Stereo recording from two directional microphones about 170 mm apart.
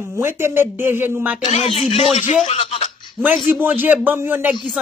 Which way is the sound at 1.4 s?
35° left (ahead or behind).